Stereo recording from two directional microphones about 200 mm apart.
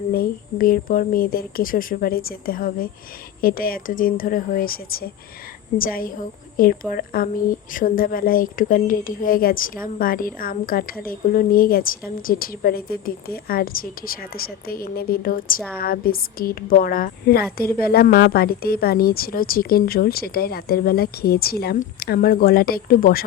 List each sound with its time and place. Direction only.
0.1 s a woman's voice: 45° left (ahead or behind)